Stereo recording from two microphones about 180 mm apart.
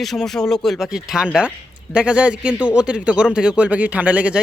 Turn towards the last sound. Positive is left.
turn(degrees=-5)  # may be behind; listen again after turning